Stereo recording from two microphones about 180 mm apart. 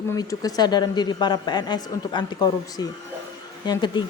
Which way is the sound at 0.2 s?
20° left (ahead or behind).